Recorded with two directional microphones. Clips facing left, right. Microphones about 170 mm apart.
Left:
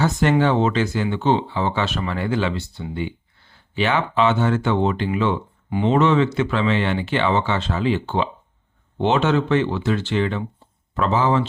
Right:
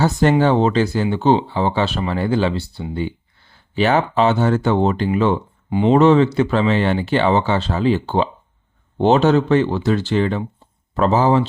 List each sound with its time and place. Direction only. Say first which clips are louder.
0.0 s speech: right 3 dB; 35° right (ahead or behind)